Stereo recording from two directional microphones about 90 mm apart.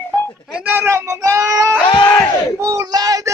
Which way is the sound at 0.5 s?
20° right (ahead or behind).